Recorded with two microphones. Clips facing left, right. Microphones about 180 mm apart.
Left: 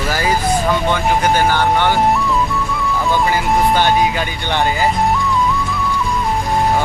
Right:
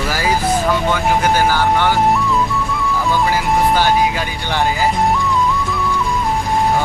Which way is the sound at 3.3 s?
5° right (ahead or behind).